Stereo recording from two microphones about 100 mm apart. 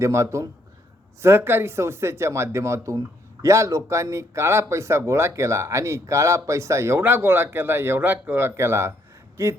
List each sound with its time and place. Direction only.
0.0 s speech: 30° right (ahead or behind)